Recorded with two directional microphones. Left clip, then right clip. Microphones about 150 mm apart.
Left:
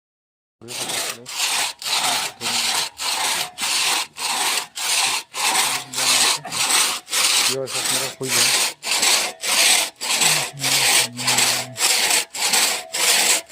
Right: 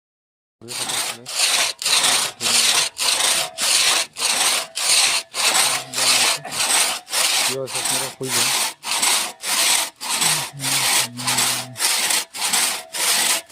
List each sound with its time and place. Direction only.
0.7 s sawing: 25° right (ahead or behind)
1.8 s wood: 50° right (ahead or behind)
3.6 s rub: 45° right (ahead or behind); by 13.3 s 10° right (ahead or behind)